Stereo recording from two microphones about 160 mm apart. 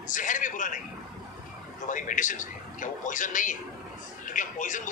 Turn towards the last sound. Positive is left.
turn(degrees=55)  # may be behind; listen again after turning